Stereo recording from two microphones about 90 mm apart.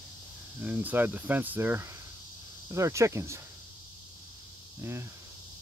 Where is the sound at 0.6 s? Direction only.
15° right (ahead or behind).